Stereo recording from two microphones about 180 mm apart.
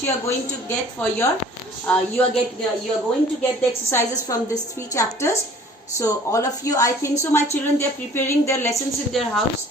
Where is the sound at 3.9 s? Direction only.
15° left (ahead or behind).